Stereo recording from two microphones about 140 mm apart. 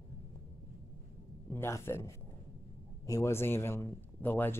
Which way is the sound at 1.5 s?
20° left (ahead or behind).